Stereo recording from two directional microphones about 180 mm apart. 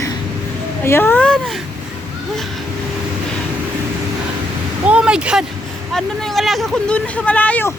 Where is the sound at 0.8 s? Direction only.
15° left (ahead or behind).